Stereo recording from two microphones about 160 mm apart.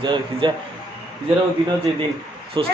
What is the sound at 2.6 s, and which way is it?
Speech, 30° right (ahead or behind).